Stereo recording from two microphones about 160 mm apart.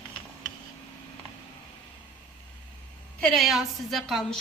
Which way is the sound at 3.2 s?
5° left (ahead or behind).